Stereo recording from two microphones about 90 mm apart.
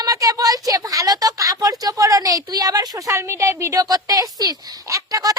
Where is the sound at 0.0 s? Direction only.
40° right (ahead or behind).